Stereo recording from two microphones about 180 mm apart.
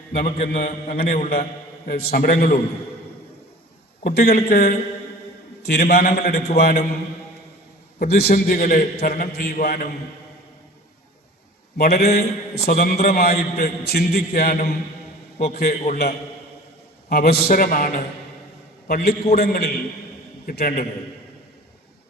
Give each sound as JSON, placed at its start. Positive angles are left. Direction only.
{"t": 0.1, "sound": "a man's voice", "side_deg": 50}
{"t": 4.0, "sound": "a man's voice", "side_deg": 60}
{"t": 7.9, "sound": "a man's voice", "side_deg": 60}
{"t": 11.8, "sound": "a man's voice", "side_deg": 60}